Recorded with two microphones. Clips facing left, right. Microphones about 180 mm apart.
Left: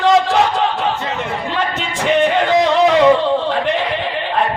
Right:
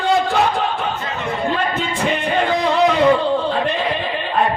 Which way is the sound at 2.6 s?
75° left (ahead or behind).